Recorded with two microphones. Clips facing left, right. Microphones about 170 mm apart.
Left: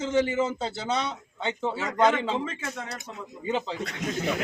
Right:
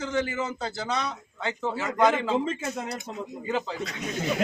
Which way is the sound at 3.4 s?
25° left (ahead or behind).